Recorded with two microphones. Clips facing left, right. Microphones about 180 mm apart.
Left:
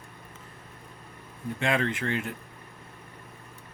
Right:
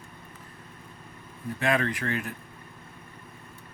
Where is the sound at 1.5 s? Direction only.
25° left (ahead or behind).